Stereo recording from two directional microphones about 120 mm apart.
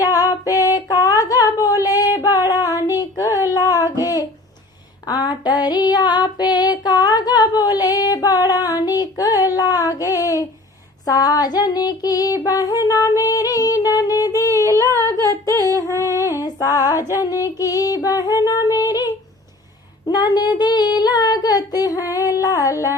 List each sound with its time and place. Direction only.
0.0 s female singing: 30° left (ahead or behind)
3.0 s a sound: 30° left (ahead or behind)
5.0 s female singing: 30° left (ahead or behind)
9.6 s child singing: 30° left (ahead or behind)
11.0 s female singing: 30° left (ahead or behind)
12.5 s a sound: 35° left (ahead or behind)
14.8 s humming: 30° right (ahead or behind)
15.0 s humming: 25° left (ahead or behind)
15.9 s female singing: 25° left (ahead or behind)
17.0 s music: 20° right (ahead or behind)
17.4 s female singing: 30° left (ahead or behind)
18.9 s a sound: 35° left (ahead or behind)
20.1 s child singing: 35° left (ahead or behind)